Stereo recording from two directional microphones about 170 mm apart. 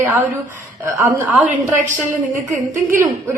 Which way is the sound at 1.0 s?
10° right (ahead or behind).